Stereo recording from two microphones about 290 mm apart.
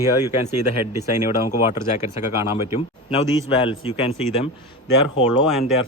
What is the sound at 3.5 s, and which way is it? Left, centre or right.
Speech, centre.